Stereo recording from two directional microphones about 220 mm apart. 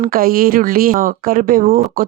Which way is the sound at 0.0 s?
40° right (ahead or behind).